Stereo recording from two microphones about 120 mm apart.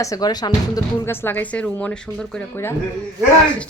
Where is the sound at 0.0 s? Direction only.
30° left (ahead or behind).